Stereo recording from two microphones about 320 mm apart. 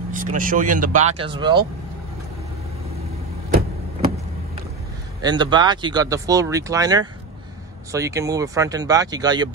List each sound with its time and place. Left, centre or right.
0.1 s speech: right
5.2 s speech: centre